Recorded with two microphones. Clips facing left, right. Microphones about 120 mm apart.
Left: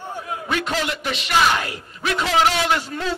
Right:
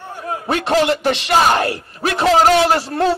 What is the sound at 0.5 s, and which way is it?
A man's voice, 40° right (ahead or behind).